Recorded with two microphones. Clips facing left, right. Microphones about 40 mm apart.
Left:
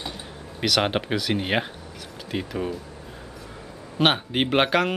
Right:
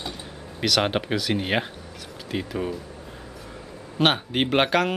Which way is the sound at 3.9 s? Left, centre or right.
Centre.